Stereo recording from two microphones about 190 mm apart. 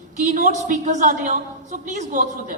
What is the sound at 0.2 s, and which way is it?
A woman's voice, 45° right (ahead or behind).